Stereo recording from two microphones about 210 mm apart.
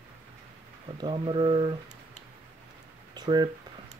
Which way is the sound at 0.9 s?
25° right (ahead or behind).